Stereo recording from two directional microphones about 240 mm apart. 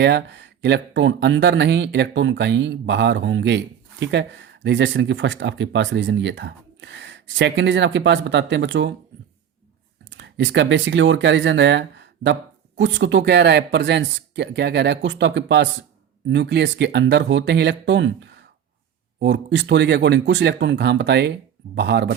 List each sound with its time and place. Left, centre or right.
0.0 s speech: right
10.1 s speech: right